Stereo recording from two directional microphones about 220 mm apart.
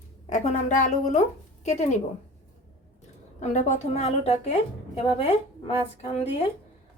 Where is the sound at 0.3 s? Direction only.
35° left (ahead or behind).